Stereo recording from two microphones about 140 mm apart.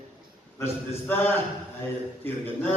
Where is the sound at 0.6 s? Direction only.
15° left (ahead or behind).